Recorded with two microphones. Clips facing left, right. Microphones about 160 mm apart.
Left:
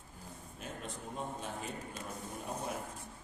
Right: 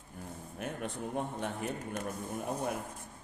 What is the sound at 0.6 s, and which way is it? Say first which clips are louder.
A man's voice: right 7 dB; 60° right (ahead or behind).